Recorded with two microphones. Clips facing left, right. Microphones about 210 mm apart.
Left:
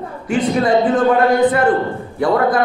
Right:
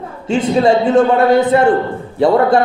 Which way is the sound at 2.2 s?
30° right (ahead or behind).